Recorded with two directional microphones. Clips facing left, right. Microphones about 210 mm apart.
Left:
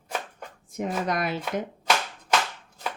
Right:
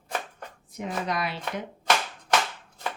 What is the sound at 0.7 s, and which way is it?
Speech, 50° left (ahead or behind).